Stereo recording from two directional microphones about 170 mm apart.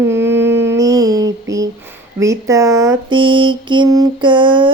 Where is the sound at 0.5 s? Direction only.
90° right.